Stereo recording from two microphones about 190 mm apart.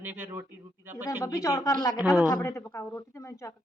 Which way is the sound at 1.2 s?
15° left (ahead or behind).